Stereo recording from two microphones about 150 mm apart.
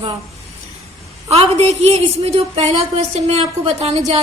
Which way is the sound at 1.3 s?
45° right (ahead or behind).